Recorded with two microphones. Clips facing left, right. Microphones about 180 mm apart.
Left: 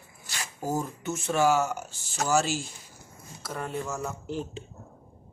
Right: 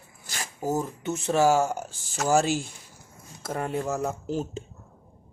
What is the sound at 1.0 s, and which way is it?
Speech, 25° right (ahead or behind).